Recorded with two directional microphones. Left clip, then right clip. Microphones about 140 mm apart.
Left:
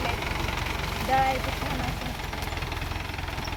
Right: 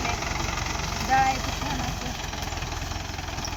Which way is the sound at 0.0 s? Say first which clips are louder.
Right 1 dB; 40° right (ahead or behind).